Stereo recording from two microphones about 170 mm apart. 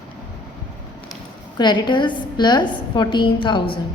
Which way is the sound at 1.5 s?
25° left (ahead or behind).